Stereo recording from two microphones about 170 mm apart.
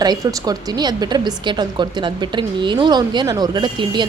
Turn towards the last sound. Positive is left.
turn(degrees=-25)  # may be behind; listen again after turning